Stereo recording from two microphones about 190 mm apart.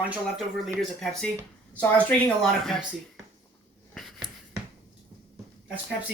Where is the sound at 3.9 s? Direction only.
Centre (ahead or behind).